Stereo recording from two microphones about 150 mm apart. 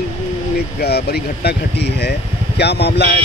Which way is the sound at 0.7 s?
90° left.